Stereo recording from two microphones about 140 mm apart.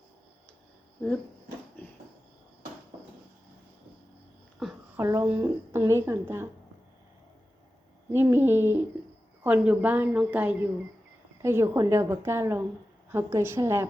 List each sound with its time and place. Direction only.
4.9 s a woman's voice: 15° right (ahead or behind)
8.1 s a woman's voice: 15° right (ahead or behind)